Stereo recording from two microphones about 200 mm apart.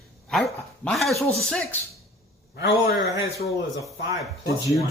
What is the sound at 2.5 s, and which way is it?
Speech, 55° left (ahead or behind).